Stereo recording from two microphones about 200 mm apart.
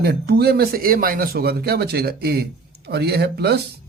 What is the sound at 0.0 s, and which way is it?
Speech, 55° right (ahead or behind).